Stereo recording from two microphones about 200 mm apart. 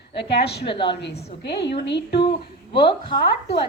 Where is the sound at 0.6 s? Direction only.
25° left (ahead or behind).